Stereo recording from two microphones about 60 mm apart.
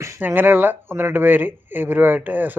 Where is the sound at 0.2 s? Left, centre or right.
Right.